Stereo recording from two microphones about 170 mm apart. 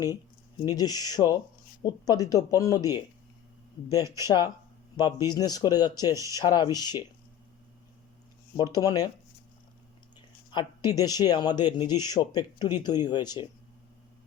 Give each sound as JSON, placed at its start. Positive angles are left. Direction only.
{"t": 0.6, "sound": "speech", "side_deg": 25}
{"t": 4.2, "sound": "speech", "side_deg": 25}
{"t": 8.5, "sound": "speech", "side_deg": 20}
{"t": 10.2, "sound": "speech", "side_deg": 25}